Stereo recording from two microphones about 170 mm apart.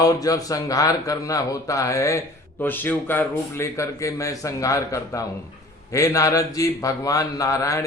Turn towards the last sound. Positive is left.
turn(degrees=20)  # may be behind; listen again after turning